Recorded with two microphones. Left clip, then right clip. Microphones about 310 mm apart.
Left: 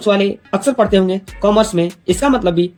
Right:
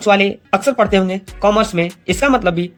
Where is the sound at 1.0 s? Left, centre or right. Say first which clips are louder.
Even; right.